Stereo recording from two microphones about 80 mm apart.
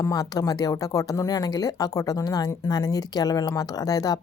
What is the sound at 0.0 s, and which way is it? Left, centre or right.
Speech, left.